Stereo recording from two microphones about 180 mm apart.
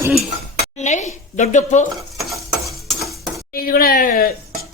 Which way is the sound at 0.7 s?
40° left (ahead or behind).